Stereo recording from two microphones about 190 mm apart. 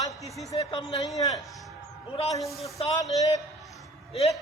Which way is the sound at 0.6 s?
20° left (ahead or behind).